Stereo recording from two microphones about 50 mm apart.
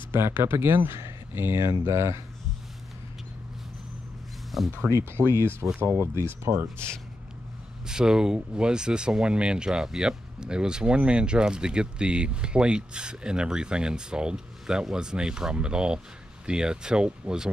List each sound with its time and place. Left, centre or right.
0.1 s speech: right
4.5 s speech: centre
4.8 s speech: right
5.8 s speech: right
7.8 s speech: centre